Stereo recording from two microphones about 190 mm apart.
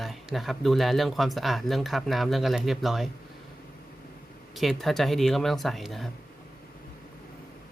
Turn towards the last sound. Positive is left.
turn(degrees=0)  # may be behind; listen again after turning